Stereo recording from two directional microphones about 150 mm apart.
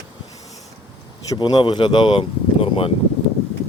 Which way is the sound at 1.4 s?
30° left (ahead or behind).